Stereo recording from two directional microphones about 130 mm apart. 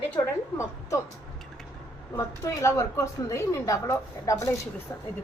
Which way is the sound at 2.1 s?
25° left (ahead or behind).